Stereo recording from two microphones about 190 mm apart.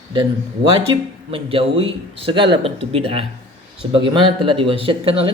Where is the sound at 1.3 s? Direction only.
30° right (ahead or behind).